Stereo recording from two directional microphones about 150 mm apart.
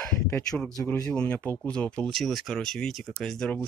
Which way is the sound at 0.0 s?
5° left (ahead or behind).